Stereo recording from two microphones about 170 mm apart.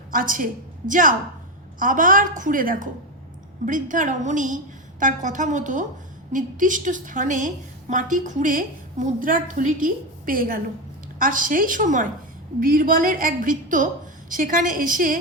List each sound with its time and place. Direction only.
0.1 s a woman's voice: 55° right (ahead or behind)